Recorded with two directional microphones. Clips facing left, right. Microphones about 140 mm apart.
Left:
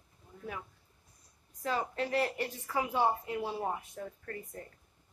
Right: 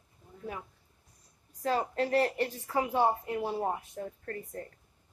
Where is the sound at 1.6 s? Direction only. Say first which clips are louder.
Right 4 dB; 40° right (ahead or behind).